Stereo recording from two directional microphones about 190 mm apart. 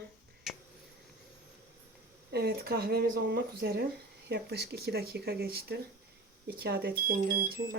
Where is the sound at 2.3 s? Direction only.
55° right (ahead or behind).